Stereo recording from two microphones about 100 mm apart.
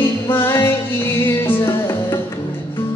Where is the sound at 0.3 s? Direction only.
20° left (ahead or behind).